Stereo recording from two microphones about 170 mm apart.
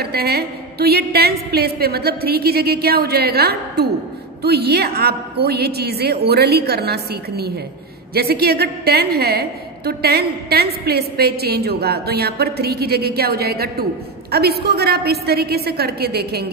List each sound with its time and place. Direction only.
0.0 s a woman's voice: 65° right (ahead or behind)